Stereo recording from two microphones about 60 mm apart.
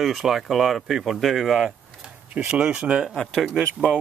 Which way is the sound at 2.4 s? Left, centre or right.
Right.